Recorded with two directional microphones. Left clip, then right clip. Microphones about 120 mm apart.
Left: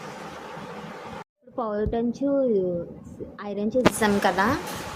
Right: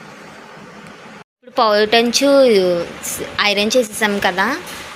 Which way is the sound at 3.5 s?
20° right (ahead or behind).